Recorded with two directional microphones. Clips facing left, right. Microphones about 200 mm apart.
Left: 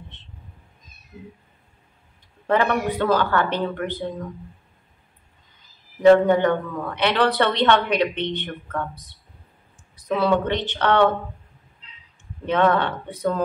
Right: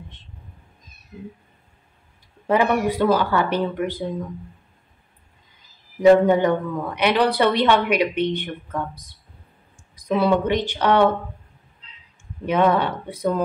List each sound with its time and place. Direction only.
2.4 s a woman's voice: 10° right (ahead or behind)
6.0 s a woman's voice: 10° right (ahead or behind)
12.4 s a woman's voice: 10° right (ahead or behind)